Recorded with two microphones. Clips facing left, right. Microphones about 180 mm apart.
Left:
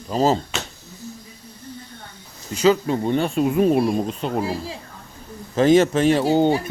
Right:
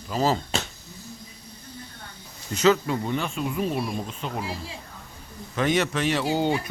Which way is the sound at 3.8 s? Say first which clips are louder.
Left 9 dB; 35° left (ahead or behind).